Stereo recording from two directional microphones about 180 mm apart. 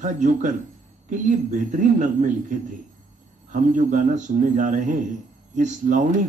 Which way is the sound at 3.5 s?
45° right (ahead or behind).